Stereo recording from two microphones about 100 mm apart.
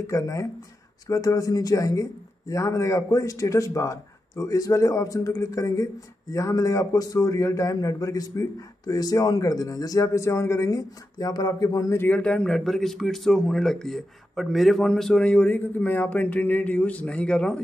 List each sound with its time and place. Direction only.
0.0 s a man's voice: 30° left (ahead or behind)
11.9 s a man's voice: 20° left (ahead or behind)
12.2 s speech: 10° left (ahead or behind)